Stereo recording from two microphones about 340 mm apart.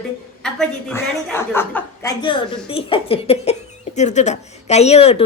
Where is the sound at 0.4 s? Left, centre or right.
Centre.